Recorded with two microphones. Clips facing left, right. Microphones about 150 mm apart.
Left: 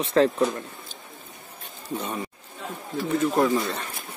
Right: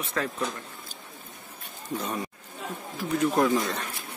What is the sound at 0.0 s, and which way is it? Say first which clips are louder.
Speech: left 10 dB; 30° left (ahead or behind).